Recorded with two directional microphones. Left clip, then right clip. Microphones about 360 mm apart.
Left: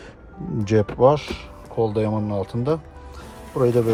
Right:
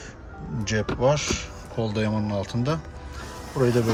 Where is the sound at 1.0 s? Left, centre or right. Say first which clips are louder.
Left 5 dB; centre.